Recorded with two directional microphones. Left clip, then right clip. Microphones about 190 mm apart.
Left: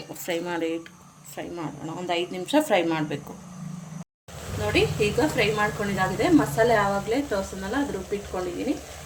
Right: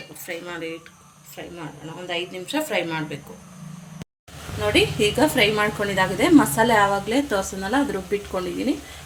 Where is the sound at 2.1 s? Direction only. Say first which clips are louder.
Left 3 dB; 55° left (ahead or behind).